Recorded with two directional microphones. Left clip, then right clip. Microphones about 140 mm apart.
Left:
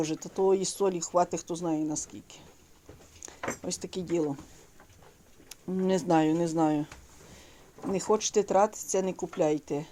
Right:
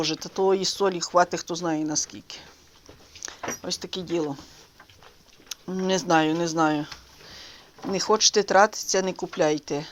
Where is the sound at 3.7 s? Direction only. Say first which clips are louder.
Right 5 dB; 25° left (ahead or behind).